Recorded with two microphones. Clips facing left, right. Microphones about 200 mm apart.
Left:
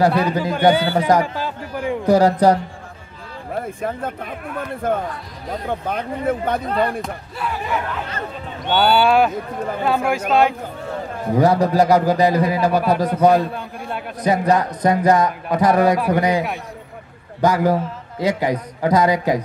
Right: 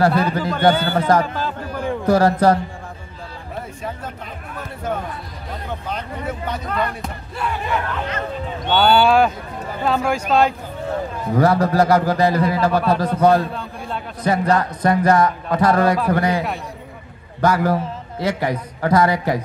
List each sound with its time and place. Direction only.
0.0 s a man's voice: 15° left (ahead or behind)
3.6 s speech: 55° left (ahead or behind)
7.0 s speech: centre (ahead or behind)
11.3 s speech: 15° left (ahead or behind)